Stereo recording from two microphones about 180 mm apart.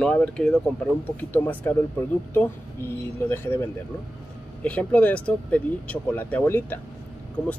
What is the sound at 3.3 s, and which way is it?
Speech, 15° left (ahead or behind).